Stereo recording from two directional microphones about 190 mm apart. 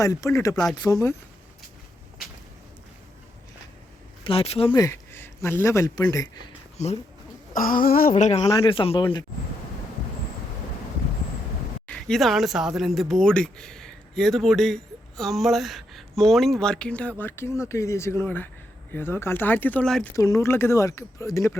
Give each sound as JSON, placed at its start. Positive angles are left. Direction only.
{"t": 0.0, "sound": "speech", "side_deg": 15}
{"t": 4.2, "sound": "speech", "side_deg": 30}
{"t": 6.8, "sound": "speech", "side_deg": 35}
{"t": 7.5, "sound": "a sound", "side_deg": 45}
{"t": 8.4, "sound": "speech", "side_deg": 25}
{"t": 11.9, "sound": "speech", "side_deg": 5}
{"t": 20.1, "sound": "speech", "side_deg": 15}